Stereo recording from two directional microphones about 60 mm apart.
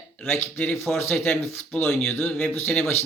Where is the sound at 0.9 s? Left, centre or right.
Left.